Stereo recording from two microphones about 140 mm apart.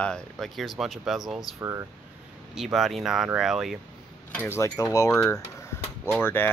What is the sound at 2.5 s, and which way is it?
Speech, centre (ahead or behind).